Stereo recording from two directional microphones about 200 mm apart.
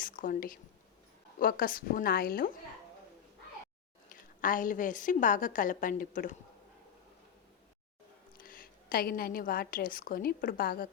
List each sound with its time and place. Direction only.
0.0 s a woman's voice: 45° left (ahead or behind)
4.1 s a woman's voice: 45° left (ahead or behind)
8.4 s a woman's voice: 45° left (ahead or behind)